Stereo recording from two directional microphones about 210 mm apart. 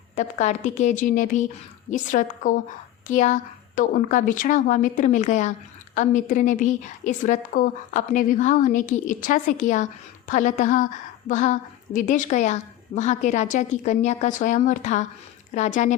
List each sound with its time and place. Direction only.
0.2 s speech: 35° left (ahead or behind)